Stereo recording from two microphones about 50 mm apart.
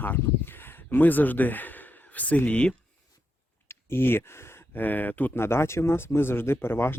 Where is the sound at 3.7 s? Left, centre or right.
Left.